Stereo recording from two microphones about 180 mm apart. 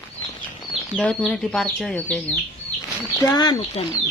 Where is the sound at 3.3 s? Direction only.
25° left (ahead or behind).